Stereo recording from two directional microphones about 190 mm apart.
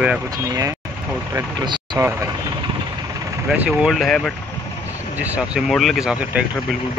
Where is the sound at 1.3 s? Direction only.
25° right (ahead or behind).